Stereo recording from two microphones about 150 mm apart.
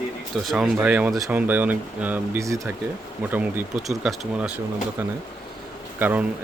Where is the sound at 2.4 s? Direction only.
20° right (ahead or behind).